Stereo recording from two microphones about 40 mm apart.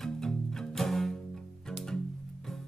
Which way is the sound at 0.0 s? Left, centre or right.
Centre.